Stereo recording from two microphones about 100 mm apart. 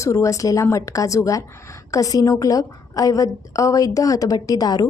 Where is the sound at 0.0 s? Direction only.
30° left (ahead or behind).